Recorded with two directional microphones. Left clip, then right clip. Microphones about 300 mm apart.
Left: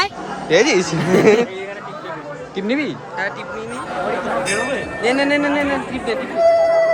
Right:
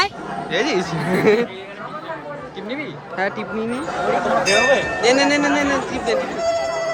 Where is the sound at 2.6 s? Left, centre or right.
Left.